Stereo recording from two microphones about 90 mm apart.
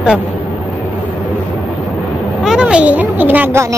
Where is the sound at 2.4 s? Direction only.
10° right (ahead or behind).